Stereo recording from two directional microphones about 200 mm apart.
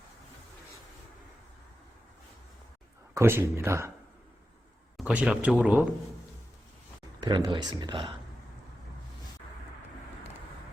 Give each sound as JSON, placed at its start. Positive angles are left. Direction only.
{"t": 3.2, "sound": "speech", "side_deg": -10}
{"t": 4.9, "sound": "speech", "side_deg": -5}
{"t": 7.2, "sound": "speech", "side_deg": -20}